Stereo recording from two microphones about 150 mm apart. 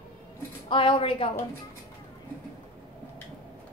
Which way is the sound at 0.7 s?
35° left (ahead or behind).